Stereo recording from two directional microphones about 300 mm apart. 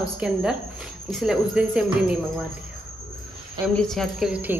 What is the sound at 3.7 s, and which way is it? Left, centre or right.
Speech, centre.